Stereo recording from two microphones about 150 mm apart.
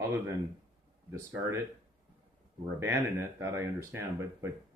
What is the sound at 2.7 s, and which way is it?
Speech, 15° right (ahead or behind).